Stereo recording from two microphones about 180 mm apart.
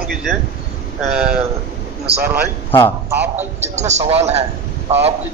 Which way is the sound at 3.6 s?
40° right (ahead or behind).